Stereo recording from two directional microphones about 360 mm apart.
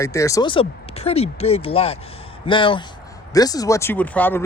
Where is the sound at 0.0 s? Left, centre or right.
Centre.